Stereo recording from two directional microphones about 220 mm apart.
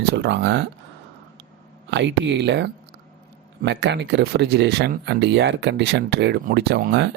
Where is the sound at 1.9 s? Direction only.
55° right (ahead or behind).